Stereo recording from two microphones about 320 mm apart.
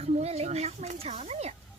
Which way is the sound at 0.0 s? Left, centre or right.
Centre.